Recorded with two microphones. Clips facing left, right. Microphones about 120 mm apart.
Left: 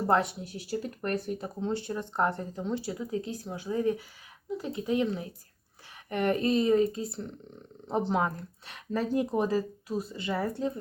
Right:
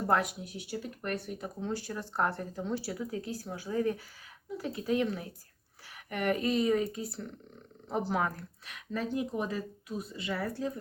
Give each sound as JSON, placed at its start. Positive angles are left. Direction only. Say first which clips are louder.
{"t": 0.1, "sound": "speech", "louder": "left 3 dB", "side_deg": 30}
{"t": 8.9, "sound": "speech", "louder": "left 5 dB", "side_deg": 40}